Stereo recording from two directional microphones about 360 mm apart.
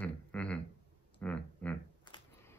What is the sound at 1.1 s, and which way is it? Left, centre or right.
Computer keyboard, centre.